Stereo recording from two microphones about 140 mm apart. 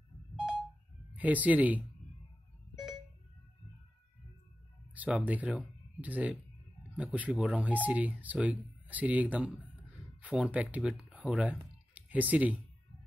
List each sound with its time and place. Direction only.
1.1 s speech: 10° right (ahead or behind)
2.7 s a sound: centre (ahead or behind)
4.9 s speech: 10° right (ahead or behind)